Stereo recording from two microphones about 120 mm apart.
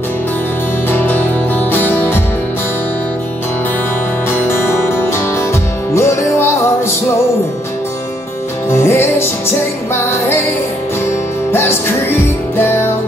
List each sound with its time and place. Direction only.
0.8 s music: 15° left (ahead or behind)
4.3 s music: 20° left (ahead or behind)
8.6 s music: 20° left (ahead or behind)
11.5 s music: 20° left (ahead or behind)